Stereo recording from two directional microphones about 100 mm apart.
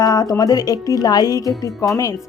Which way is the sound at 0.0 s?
40° left (ahead or behind).